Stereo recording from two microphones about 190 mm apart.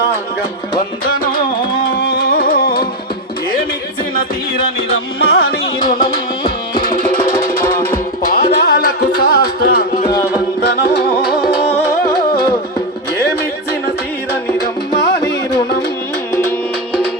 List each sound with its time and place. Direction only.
0.7 s music: 50° left (ahead or behind)
4.9 s music: 55° left (ahead or behind)
14.6 s music: 60° left (ahead or behind)
16.3 s tabla: 15° left (ahead or behind)